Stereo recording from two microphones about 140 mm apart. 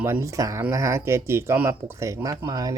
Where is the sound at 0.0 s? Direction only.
20° right (ahead or behind).